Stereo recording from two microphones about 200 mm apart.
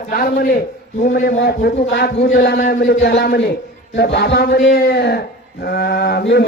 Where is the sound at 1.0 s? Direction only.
40° left (ahead or behind).